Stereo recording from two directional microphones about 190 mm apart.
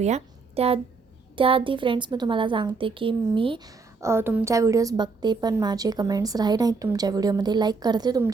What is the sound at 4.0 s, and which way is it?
A woman's voice, 15° right (ahead or behind).